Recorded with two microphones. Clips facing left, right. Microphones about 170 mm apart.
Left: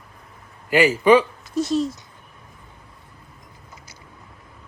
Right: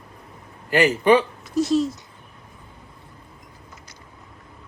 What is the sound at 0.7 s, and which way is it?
Speech, 10° left (ahead or behind).